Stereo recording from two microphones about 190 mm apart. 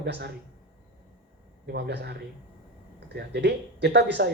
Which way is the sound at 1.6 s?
60° right (ahead or behind).